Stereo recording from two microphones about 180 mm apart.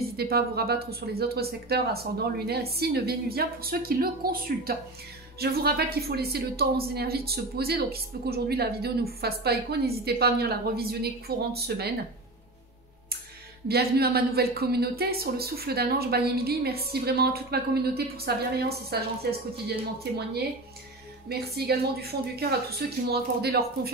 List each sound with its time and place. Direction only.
0.2 s speech: 60° right (ahead or behind)
13.7 s speech: 60° right (ahead or behind)
21.3 s speech: 60° right (ahead or behind)